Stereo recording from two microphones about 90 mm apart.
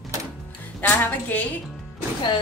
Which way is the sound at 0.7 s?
20° left (ahead or behind).